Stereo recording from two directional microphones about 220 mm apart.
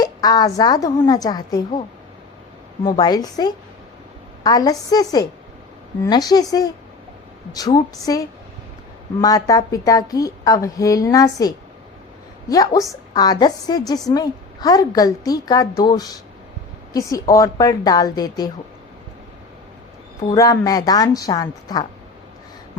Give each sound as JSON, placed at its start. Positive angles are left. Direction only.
{"t": 0.0, "sound": "a woman's voice", "side_deg": 20}
{"t": 2.8, "sound": "a woman's voice", "side_deg": 20}
{"t": 20.2, "sound": "a woman's voice", "side_deg": 15}